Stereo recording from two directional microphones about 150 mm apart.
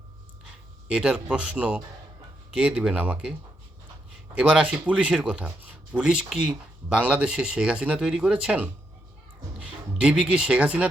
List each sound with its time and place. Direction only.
0.9 s speech: 5° right (ahead or behind)
4.4 s speech: 10° right (ahead or behind)